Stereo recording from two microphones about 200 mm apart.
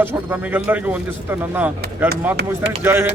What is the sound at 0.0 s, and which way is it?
Speech, 10° right (ahead or behind).